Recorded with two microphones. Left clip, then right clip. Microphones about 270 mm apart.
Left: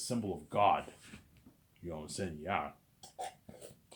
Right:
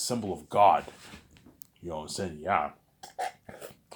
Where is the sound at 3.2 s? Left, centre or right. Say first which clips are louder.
Right 9 dB; right.